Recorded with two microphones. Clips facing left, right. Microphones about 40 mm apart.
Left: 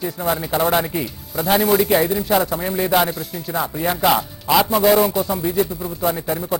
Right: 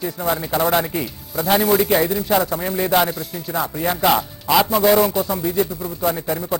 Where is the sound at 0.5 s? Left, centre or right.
Centre.